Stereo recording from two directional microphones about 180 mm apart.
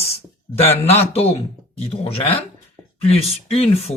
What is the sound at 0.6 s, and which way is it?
Speech, 35° left (ahead or behind).